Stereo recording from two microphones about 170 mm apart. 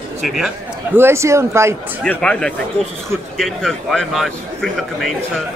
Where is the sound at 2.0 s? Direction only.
5° left (ahead or behind).